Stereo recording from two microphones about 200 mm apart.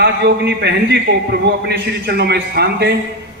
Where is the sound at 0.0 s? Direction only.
55° right (ahead or behind).